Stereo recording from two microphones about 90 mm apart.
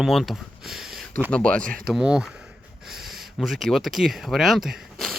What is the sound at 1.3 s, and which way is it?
Speech, 10° left (ahead or behind).